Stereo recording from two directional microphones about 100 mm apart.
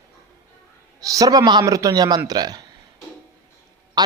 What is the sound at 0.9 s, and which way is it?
A man's voice, 35° right (ahead or behind).